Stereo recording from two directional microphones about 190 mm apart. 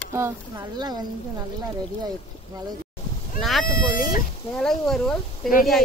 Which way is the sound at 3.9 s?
45° left (ahead or behind).